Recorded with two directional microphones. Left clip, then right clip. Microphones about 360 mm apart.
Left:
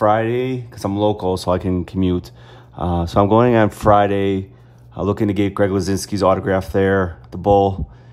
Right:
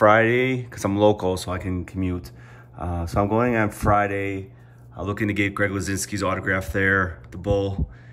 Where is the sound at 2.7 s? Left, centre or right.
Right.